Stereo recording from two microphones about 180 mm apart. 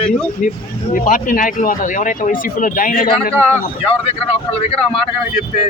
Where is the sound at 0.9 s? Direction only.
50° left (ahead or behind).